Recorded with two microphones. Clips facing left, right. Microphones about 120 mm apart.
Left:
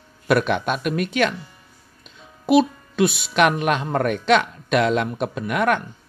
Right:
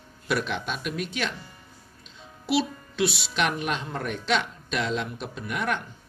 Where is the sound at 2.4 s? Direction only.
50° left (ahead or behind).